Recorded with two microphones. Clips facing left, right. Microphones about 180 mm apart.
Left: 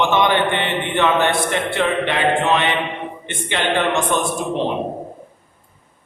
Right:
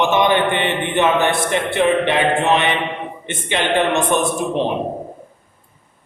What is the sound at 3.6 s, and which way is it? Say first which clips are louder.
Speech: right 1 dB; 20° right (ahead or behind).